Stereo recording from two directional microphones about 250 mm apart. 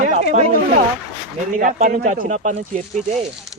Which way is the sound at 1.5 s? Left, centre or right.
Right.